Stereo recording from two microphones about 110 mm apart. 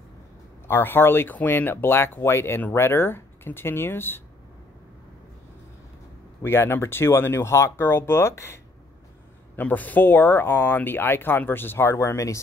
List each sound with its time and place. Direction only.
0.7 s speech: 20° left (ahead or behind)
6.4 s speech: 20° left (ahead or behind)
9.6 s speech: 15° left (ahead or behind)